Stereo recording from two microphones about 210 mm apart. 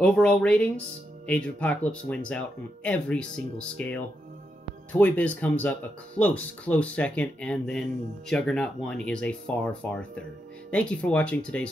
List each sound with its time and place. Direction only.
0.0 s speech: 5° left (ahead or behind)